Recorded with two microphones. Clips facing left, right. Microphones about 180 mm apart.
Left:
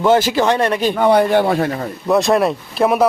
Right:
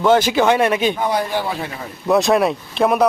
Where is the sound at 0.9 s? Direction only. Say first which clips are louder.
Left 8 dB; 65° left (ahead or behind); by 1.9 s 50° left (ahead or behind).